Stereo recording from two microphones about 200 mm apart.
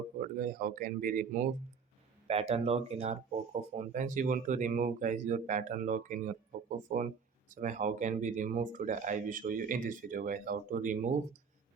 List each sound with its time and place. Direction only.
0.2 s speech: 40° right (ahead or behind)
2.2 s speech: 30° right (ahead or behind)